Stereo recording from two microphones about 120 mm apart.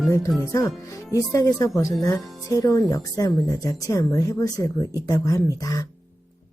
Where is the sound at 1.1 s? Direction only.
25° left (ahead or behind).